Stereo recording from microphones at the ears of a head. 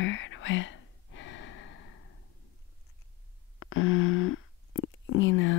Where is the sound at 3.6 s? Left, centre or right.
Left.